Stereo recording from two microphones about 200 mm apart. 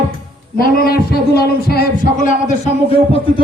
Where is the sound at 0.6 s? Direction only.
50° left (ahead or behind).